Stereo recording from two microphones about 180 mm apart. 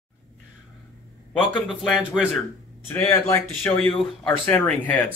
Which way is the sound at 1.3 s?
Centre (ahead or behind).